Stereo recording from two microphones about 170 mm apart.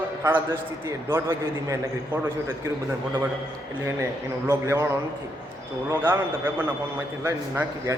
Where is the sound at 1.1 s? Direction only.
15° right (ahead or behind).